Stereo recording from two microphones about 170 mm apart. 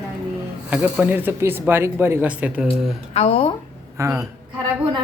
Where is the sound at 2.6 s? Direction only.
35° left (ahead or behind).